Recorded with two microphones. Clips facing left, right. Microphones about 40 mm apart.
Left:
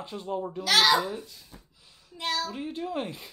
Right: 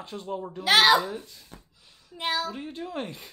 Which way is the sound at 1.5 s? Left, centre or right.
Right.